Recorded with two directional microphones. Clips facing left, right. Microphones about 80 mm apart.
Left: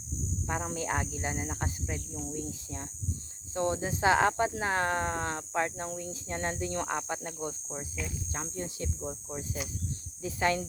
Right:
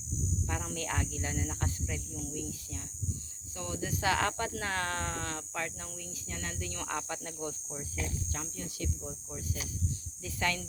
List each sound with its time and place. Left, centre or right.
0.4 s speech: left
8.3 s cricket: left
10.2 s speech: left